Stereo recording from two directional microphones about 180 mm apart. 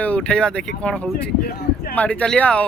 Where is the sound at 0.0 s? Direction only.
5° left (ahead or behind).